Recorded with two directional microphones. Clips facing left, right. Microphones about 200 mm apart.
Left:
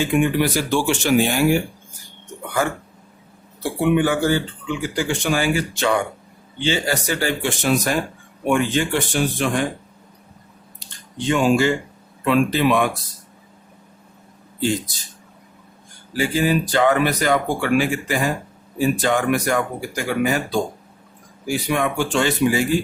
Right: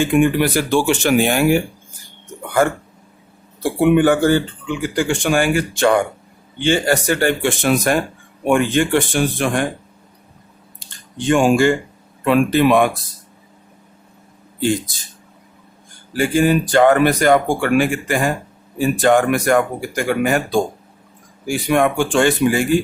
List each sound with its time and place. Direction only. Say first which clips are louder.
0.0 s speech: right 4 dB; 55° right (ahead or behind)
3.6 s speech: right 5 dB; 55° right (ahead or behind)
11.3 s speech: right 4 dB; 50° right (ahead or behind)
16.1 s speech: right 4 dB; 50° right (ahead or behind)